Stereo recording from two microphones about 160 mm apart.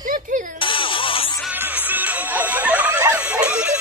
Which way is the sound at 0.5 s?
35° left (ahead or behind).